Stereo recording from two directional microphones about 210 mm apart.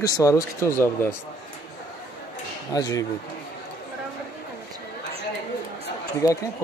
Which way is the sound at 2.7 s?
15° left (ahead or behind).